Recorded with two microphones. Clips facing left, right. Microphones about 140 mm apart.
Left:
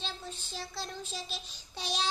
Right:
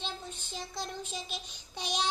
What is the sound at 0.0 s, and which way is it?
Child singing, 15° right (ahead or behind).